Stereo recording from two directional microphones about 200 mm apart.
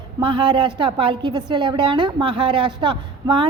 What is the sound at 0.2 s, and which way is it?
A woman's voice, 25° right (ahead or behind).